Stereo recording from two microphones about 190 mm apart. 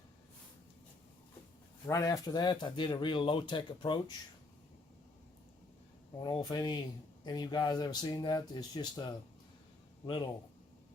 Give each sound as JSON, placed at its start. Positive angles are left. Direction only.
{"t": 1.9, "sound": "speech", "side_deg": 20}
{"t": 6.1, "sound": "speech", "side_deg": 25}